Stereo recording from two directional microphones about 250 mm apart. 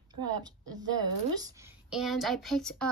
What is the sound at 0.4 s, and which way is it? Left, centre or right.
A woman's voice, centre.